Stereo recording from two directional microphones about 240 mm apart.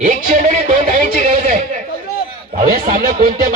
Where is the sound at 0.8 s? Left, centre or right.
Right.